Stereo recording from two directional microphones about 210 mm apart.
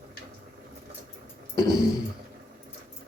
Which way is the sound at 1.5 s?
15° left (ahead or behind).